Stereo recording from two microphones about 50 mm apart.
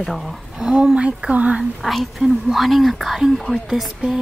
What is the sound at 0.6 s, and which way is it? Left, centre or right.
Speech, centre.